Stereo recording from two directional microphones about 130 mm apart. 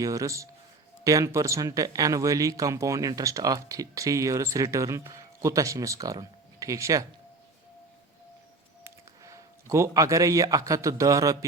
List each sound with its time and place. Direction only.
0.0 s speech: 25° right (ahead or behind)
8.8 s a man's voice: 25° right (ahead or behind)